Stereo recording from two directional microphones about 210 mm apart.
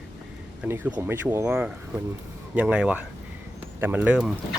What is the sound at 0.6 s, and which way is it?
Speech, 5° right (ahead or behind).